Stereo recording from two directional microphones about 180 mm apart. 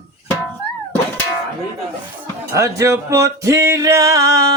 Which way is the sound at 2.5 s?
15° right (ahead or behind).